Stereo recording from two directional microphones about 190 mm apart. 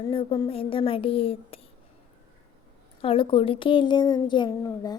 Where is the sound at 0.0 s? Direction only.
25° left (ahead or behind).